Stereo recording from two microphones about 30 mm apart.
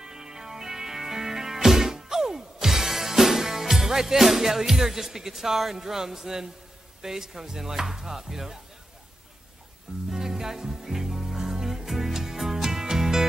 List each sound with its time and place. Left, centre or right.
0.0 s music: centre
7.0 s speech: centre
10.1 s music: centre